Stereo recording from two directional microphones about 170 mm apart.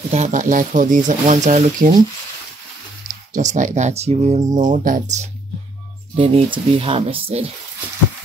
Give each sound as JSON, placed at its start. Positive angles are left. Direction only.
{"t": 0.1, "sound": "speech", "side_deg": -45}
{"t": 3.3, "sound": "speech", "side_deg": -45}
{"t": 6.1, "sound": "speech", "side_deg": -35}